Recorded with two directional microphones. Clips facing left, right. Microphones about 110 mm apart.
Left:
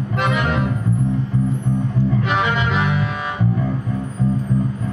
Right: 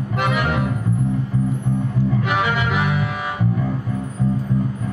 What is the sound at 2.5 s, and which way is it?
Accordion, 15° right (ahead or behind).